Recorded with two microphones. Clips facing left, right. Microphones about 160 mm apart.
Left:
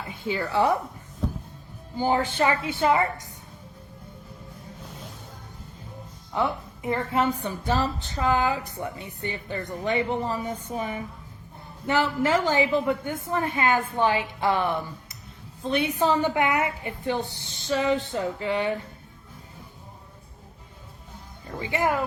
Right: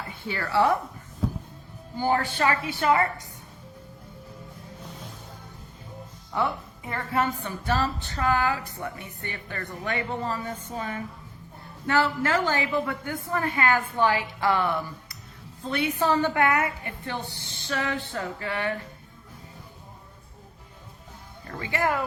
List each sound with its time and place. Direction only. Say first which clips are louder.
0.3 s a woman's voice: even; 15° left (ahead or behind)
1.2 s music: right 1 dB; 5° right (ahead or behind)
2.0 s a woman's voice: left 1 dB; 15° left (ahead or behind)
6.3 s a woman's voice: left 1 dB; 20° left (ahead or behind)
21.6 s a woman's voice: left 1 dB; 20° left (ahead or behind)